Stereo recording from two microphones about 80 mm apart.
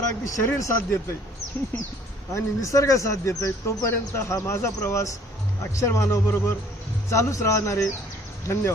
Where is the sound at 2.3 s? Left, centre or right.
Left.